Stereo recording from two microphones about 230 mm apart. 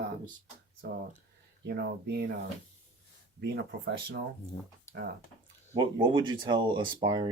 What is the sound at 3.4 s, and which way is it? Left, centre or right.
Speech, right.